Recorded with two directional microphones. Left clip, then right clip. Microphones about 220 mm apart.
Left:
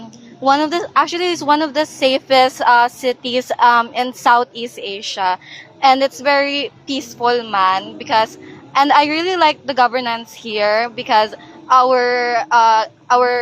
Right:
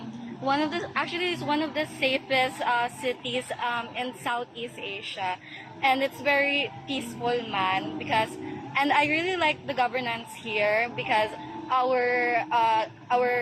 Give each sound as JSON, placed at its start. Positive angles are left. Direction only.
{"t": 0.4, "sound": "a woman's voice", "side_deg": 55}